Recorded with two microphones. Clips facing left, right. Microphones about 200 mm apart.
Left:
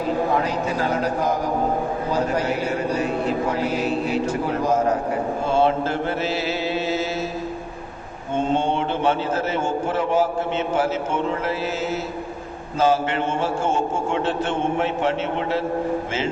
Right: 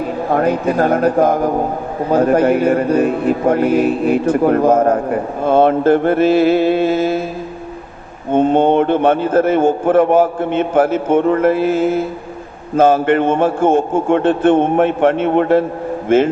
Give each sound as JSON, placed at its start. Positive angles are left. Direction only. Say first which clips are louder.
{"t": 0.3, "sound": "a man's voice", "louder": "right 7 dB", "side_deg": -55}
{"t": 8.3, "sound": "a man's voice", "louder": "right 10 dB", "side_deg": -55}